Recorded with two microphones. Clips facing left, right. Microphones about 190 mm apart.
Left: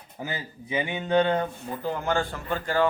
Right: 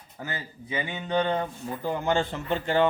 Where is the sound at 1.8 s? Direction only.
15° right (ahead or behind).